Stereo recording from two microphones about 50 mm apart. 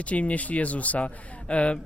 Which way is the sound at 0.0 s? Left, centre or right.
Left.